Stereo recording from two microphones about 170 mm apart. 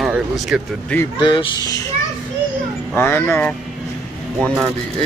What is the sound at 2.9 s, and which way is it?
Speech, 10° left (ahead or behind).